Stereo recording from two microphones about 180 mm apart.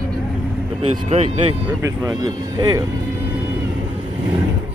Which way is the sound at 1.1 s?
30° right (ahead or behind).